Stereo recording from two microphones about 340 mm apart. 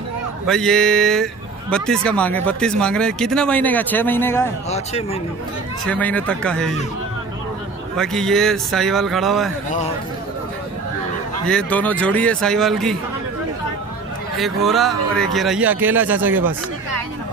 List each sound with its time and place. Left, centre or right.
0.5 s speech: centre
4.6 s speech: centre
5.9 s speech: centre
8.0 s speech: centre
11.4 s speech: centre
14.4 s speech: centre